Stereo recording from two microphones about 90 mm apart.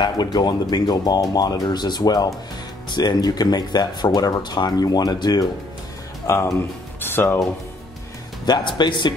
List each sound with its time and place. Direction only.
0.0 s speech: 50° left (ahead or behind)
6.2 s speech: 30° left (ahead or behind)
7.0 s music: 25° left (ahead or behind)
8.5 s speech: 55° left (ahead or behind)